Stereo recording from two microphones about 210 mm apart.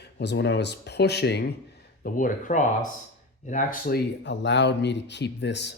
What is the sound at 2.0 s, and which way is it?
Speech, 40° left (ahead or behind).